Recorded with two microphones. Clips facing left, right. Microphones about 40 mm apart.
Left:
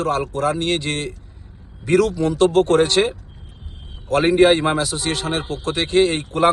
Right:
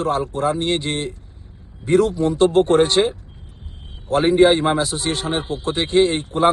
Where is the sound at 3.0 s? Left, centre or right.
Left.